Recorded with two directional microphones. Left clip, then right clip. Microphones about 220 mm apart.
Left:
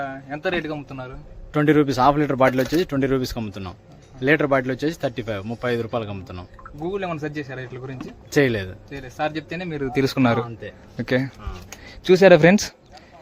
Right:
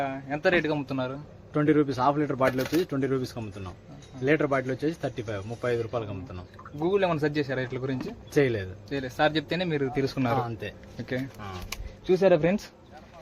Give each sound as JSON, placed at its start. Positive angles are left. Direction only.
{"t": 0.0, "sound": "a man's voice", "side_deg": -10}
{"t": 0.9, "sound": "speech", "side_deg": -35}
{"t": 1.5, "sound": "speech", "side_deg": 45}
{"t": 6.8, "sound": "speech", "side_deg": -30}
{"t": 8.3, "sound": "speech", "side_deg": 45}
{"t": 8.9, "sound": "speech", "side_deg": -35}
{"t": 9.9, "sound": "speech", "side_deg": 45}